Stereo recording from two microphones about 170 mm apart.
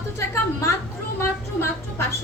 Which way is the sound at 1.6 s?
15° left (ahead or behind).